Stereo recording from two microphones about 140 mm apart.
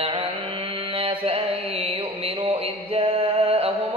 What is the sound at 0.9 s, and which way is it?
Music, 45° right (ahead or behind).